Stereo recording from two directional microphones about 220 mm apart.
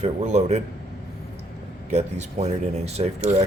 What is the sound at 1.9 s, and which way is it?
Speech, 30° right (ahead or behind).